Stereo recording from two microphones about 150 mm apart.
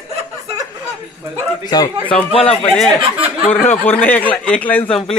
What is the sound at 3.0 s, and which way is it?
Speech, 35° right (ahead or behind).